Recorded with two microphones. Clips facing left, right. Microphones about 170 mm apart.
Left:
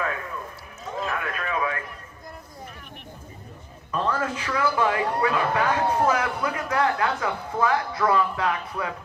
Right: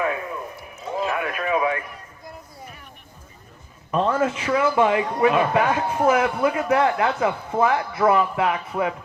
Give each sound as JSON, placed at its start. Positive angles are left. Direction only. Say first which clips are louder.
{"t": 0.0, "sound": "run", "louder": "right 5 dB", "side_deg": -20}
{"t": 0.9, "sound": "a sound", "louder": "right 4 dB", "side_deg": -20}
{"t": 3.9, "sound": "a man's voice", "louder": "right 5 dB", "side_deg": -25}